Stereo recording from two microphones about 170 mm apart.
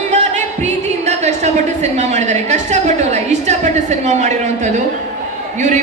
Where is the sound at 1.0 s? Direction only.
40° right (ahead or behind).